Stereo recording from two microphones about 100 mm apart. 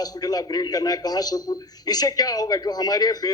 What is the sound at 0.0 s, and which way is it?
A man's voice, 40° left (ahead or behind).